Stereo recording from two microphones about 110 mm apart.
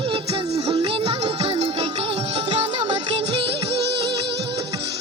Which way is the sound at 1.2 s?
70° right (ahead or behind).